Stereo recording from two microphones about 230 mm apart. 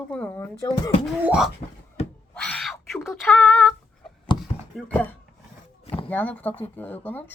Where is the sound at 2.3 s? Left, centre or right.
Centre.